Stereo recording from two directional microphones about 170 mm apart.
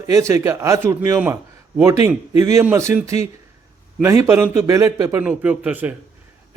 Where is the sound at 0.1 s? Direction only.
15° right (ahead or behind).